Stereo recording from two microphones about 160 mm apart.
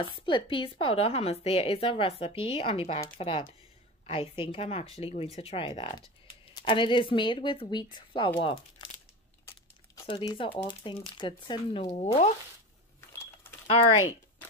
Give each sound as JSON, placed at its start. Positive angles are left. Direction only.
{"t": 0.0, "sound": "a woman's voice", "side_deg": 30}
{"t": 10.0, "sound": "a woman's voice", "side_deg": 30}
{"t": 12.0, "sound": "speech", "side_deg": 40}
{"t": 13.2, "sound": "a sound", "side_deg": 15}